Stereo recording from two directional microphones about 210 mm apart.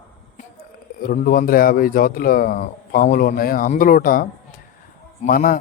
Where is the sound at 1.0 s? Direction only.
40° left (ahead or behind).